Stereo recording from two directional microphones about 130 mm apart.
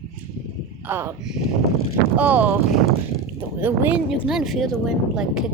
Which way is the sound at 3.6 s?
15° right (ahead or behind).